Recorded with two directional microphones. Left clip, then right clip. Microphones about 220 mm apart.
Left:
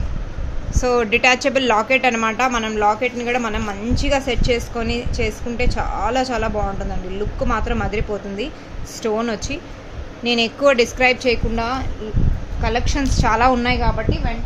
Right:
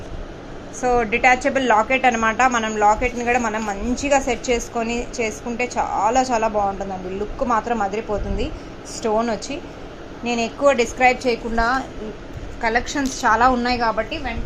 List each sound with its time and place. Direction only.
0.9 s a woman's voice: 30° left (ahead or behind); by 13.9 s 15° left (ahead or behind)